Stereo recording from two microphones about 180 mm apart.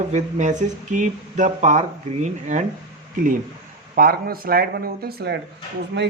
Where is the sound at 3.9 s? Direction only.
55° right (ahead or behind).